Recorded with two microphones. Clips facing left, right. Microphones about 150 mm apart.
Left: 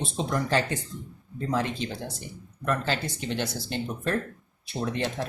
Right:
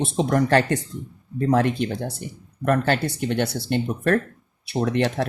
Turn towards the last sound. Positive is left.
turn(degrees=-70)  # may be behind; listen again after turning